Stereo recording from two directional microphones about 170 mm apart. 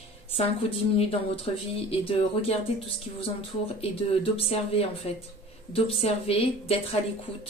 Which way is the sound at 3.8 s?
35° left (ahead or behind).